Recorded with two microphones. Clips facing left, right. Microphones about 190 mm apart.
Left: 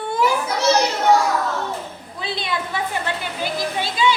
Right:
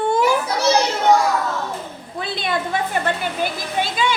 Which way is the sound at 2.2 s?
50° right (ahead or behind).